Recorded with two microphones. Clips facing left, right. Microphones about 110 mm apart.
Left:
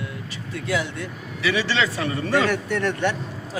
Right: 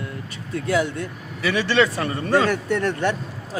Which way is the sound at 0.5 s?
45° right (ahead or behind).